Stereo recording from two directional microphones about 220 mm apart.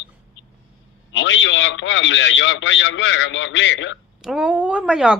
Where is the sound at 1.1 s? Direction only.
55° left (ahead or behind).